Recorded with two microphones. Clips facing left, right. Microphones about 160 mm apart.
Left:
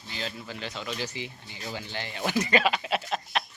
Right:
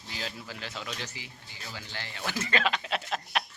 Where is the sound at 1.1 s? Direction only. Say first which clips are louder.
Left 8 dB; 20° left (ahead or behind); by 3.4 s 5° left (ahead or behind).